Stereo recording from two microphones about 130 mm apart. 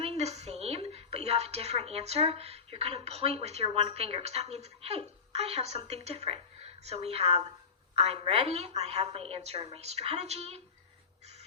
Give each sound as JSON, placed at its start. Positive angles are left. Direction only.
{"t": 0.0, "sound": "a woman's voice", "side_deg": -55}